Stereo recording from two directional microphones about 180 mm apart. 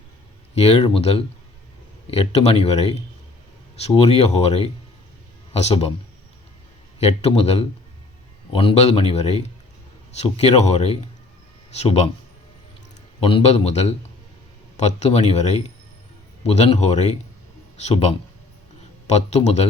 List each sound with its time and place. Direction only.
0.5 s speech: 35° left (ahead or behind)
7.0 s speech: 35° left (ahead or behind)
13.1 s a man's voice: 30° left (ahead or behind)